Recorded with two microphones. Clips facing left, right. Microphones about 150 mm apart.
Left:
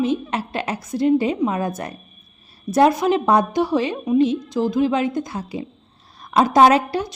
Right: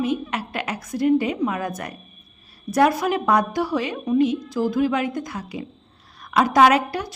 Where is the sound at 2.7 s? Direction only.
20° left (ahead or behind).